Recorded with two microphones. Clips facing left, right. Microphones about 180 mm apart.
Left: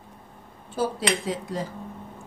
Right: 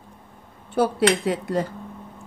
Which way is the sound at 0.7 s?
65° right (ahead or behind).